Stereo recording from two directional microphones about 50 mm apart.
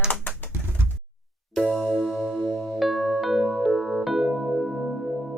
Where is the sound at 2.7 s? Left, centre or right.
Centre.